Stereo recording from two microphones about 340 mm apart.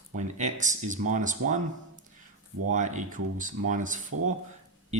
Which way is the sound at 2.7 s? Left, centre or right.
Right.